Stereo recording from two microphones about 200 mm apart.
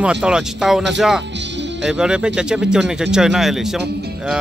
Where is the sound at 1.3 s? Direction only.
60° right (ahead or behind).